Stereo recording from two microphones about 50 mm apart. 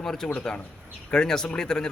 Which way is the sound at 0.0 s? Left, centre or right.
Centre.